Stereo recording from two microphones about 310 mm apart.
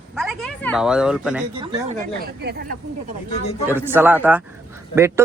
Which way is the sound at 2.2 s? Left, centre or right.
Right.